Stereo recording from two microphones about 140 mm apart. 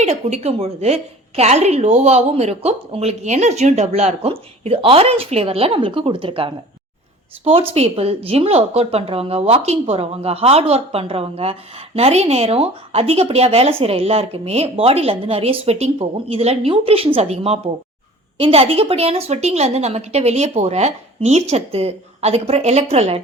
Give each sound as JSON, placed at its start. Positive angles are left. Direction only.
{"t": 0.0, "sound": "a woman's voice", "side_deg": -50}